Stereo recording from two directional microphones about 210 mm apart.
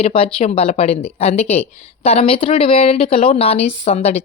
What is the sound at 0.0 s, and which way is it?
Speech, 25° left (ahead or behind).